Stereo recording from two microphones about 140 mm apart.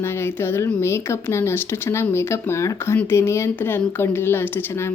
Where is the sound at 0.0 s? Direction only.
20° left (ahead or behind).